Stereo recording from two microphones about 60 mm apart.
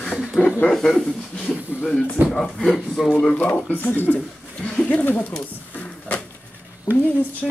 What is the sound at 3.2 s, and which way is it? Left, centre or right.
Speech, left.